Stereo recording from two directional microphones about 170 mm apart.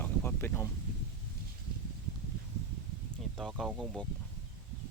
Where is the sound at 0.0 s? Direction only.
10° left (ahead or behind).